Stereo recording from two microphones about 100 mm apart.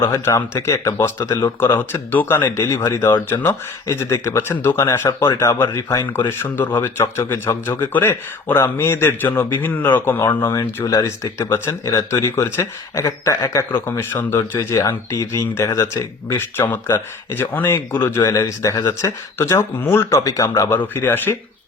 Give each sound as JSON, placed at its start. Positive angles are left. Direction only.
{"t": 0.0, "sound": "speech", "side_deg": 30}
{"t": 10.2, "sound": "speech", "side_deg": 35}
{"t": 20.7, "sound": "speech", "side_deg": 20}